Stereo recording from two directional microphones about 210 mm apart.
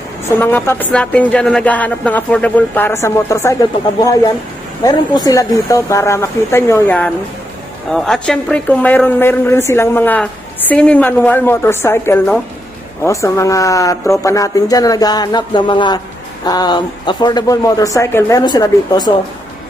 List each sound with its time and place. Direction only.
0.4 s a woman's voice: 10° left (ahead or behind)
4.8 s a woman's voice: 20° left (ahead or behind)